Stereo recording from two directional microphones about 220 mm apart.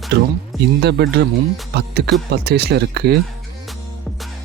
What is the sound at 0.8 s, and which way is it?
Speech, 50° right (ahead or behind).